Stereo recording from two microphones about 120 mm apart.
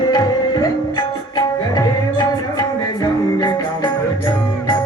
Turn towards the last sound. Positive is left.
turn(degrees=40)  # may be behind; listen again after turning